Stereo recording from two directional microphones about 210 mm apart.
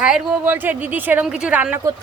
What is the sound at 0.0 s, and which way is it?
A woman's voice, 5° right (ahead or behind).